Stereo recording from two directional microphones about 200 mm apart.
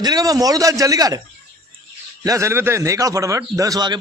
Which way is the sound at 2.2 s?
15° right (ahead or behind).